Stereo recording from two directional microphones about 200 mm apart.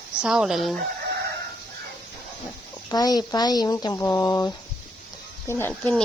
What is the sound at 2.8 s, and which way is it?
Speech, 20° left (ahead or behind).